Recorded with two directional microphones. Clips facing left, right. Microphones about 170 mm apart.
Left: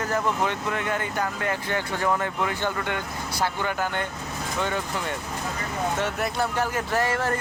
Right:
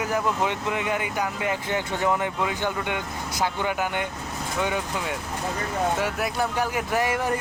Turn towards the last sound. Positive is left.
turn(degrees=-15)  # may be behind; listen again after turning